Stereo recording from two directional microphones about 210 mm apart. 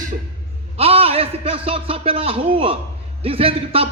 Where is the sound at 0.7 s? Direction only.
30° right (ahead or behind).